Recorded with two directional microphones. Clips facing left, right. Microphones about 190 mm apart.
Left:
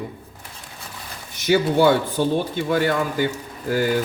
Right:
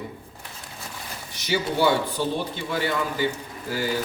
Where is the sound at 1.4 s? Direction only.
50° left (ahead or behind).